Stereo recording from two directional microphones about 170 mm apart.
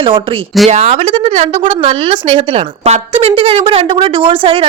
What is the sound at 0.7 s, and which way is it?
A woman's voice, 40° right (ahead or behind).